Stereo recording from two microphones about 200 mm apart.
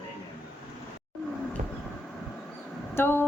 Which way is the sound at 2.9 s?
10° left (ahead or behind).